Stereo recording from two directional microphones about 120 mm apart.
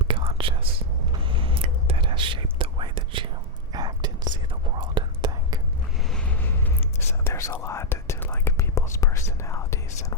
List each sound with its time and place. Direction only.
0.0 s whispering: 50° right (ahead or behind)
3.7 s whispering: 35° right (ahead or behind)
6.1 s vehicle: 10° left (ahead or behind)
7.3 s whispering: 25° left (ahead or behind)